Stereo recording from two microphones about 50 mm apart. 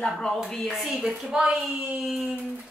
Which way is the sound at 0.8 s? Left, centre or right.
Centre.